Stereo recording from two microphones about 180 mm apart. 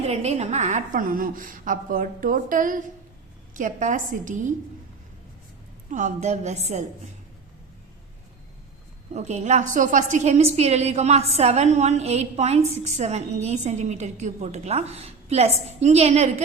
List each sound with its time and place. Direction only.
0.0 s a woman's voice: 35° right (ahead or behind)
5.9 s a woman's voice: 40° right (ahead or behind)
9.1 s a woman's voice: 40° right (ahead or behind)